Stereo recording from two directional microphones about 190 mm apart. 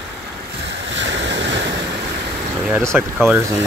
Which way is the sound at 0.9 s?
75° right (ahead or behind).